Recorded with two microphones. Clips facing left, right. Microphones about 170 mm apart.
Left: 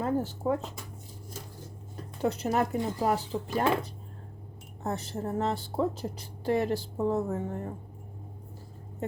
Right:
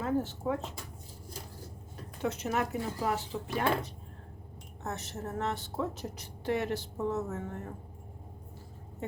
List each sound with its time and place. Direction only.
0.0 s a woman's voice: 35° left (ahead or behind)
2.2 s a woman's voice: 35° left (ahead or behind)
4.8 s a woman's voice: 30° left (ahead or behind)